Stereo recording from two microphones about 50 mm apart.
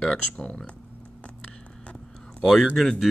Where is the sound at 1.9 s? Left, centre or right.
Left.